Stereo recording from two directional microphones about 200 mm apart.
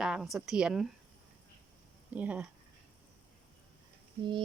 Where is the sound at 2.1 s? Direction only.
5° right (ahead or behind).